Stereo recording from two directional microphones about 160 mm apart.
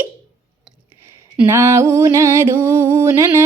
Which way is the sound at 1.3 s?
15° right (ahead or behind).